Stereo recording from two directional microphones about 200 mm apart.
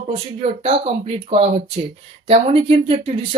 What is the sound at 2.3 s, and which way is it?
Speech, 30° right (ahead or behind).